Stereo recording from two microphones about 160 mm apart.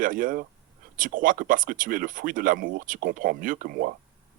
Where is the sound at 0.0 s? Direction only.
60° right (ahead or behind).